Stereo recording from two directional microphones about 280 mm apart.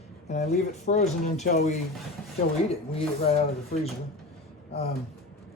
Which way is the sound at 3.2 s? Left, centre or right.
Left.